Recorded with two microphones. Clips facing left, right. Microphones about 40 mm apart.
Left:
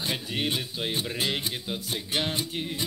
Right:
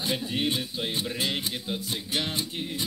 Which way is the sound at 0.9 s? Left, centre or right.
Left.